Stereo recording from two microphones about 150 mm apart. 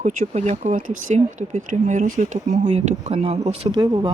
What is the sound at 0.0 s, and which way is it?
Speech, 55° right (ahead or behind).